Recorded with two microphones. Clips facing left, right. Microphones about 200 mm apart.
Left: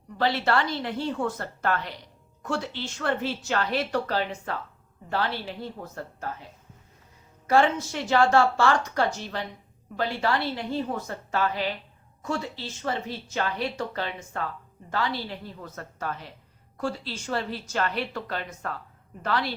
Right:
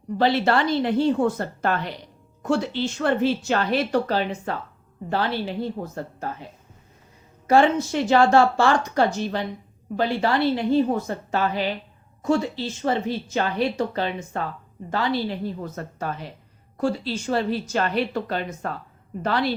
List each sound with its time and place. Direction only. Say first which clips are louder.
0.2 s speech: right 4 dB; 20° right (ahead or behind)
7.4 s speech: right 4 dB; 20° right (ahead or behind)